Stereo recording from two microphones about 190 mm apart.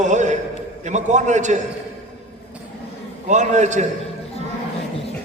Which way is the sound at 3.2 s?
40° right (ahead or behind).